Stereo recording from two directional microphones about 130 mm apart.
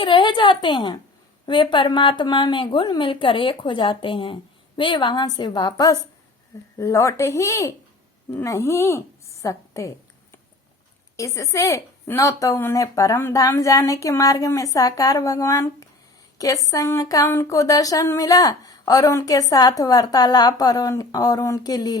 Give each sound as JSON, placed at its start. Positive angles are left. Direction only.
{"t": 0.0, "sound": "a woman's voice", "side_deg": 40}
{"t": 11.2, "sound": "speech", "side_deg": 25}